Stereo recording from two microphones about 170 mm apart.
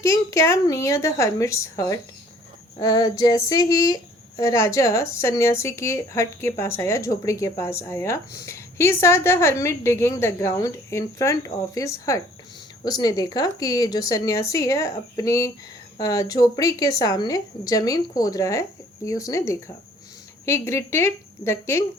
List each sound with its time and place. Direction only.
0.0 s speech: 20° left (ahead or behind)